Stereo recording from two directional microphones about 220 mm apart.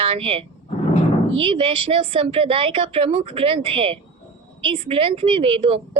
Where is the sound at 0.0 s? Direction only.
25° right (ahead or behind).